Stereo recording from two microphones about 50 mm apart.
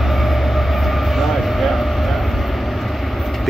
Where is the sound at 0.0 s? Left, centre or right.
Centre.